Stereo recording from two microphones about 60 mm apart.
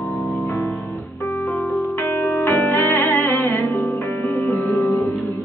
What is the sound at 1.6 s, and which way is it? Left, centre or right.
Music, centre.